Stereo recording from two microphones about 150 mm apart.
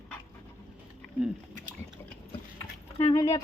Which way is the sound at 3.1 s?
25° left (ahead or behind).